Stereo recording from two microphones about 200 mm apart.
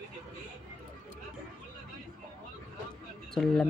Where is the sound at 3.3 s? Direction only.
Centre (ahead or behind).